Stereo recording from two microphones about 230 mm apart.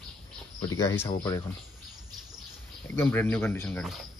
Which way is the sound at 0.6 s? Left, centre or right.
Centre.